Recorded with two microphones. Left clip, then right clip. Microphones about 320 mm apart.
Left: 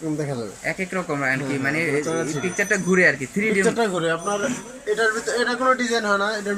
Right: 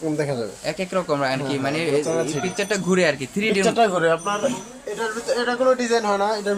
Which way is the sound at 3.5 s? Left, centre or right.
Right.